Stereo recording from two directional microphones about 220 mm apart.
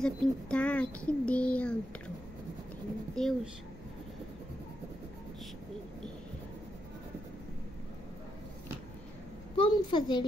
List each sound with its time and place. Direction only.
0.0 s a child's voice: 5° left (ahead or behind)
3.2 s a child's voice: centre (ahead or behind)
9.6 s a child's voice: 20° left (ahead or behind)